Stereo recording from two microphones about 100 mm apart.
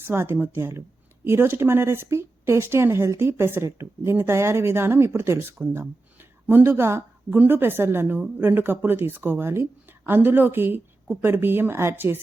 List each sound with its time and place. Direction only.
0.0 s speech: 20° right (ahead or behind)